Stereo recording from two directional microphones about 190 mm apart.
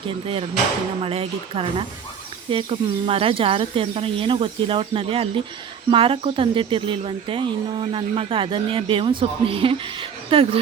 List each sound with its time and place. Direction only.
1.0 s speech: 30° right (ahead or behind)